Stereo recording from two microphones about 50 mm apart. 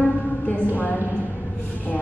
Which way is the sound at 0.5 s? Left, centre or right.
Left.